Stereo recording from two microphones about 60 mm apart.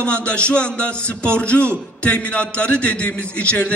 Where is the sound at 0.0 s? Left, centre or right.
Centre.